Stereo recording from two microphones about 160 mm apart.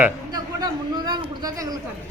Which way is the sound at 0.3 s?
25° right (ahead or behind).